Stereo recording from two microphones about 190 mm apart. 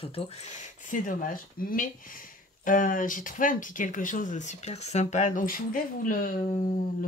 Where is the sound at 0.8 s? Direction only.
45° left (ahead or behind).